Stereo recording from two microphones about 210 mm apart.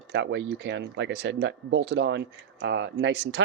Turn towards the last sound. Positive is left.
turn(degrees=-55)  # may be behind; listen again after turning